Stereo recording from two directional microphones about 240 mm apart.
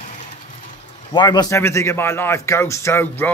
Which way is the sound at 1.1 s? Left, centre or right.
Centre.